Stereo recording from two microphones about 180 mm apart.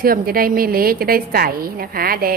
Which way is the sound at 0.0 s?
55° right (ahead or behind).